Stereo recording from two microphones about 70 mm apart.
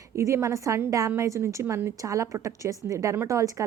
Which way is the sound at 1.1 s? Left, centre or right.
Right.